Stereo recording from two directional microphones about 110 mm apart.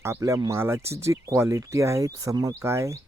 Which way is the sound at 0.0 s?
25° right (ahead or behind).